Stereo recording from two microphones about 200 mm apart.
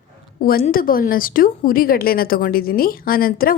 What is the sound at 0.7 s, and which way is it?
A woman's voice, 45° left (ahead or behind).